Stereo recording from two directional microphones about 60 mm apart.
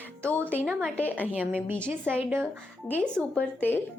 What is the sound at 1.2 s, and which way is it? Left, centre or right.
A woman's voice, right.